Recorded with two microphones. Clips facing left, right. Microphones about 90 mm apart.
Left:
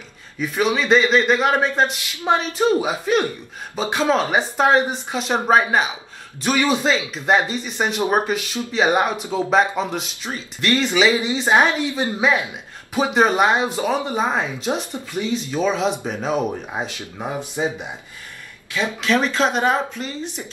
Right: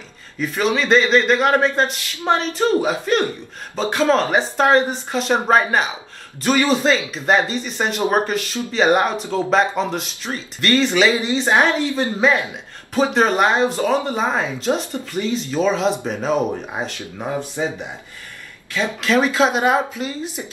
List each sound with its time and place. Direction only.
0.4 s a woman's voice: 5° left (ahead or behind)
17.2 s a woman's voice: 15° left (ahead or behind)
18.9 s speech: 5° right (ahead or behind)